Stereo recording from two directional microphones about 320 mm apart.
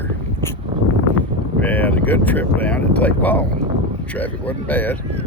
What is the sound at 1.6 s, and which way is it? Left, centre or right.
Speech, centre.